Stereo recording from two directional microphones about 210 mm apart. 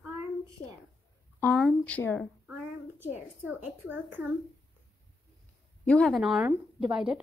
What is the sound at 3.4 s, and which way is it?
Speech, 10° right (ahead or behind).